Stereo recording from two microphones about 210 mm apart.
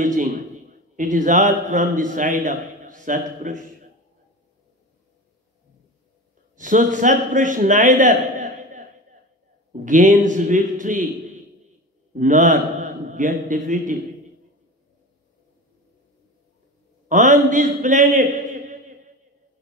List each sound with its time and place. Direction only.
0.0 s a man's voice: 40° right (ahead or behind)
6.5 s a man's voice: 35° right (ahead or behind)
12.1 s a man's voice: 35° right (ahead or behind)
17.1 s a man's voice: 35° right (ahead or behind)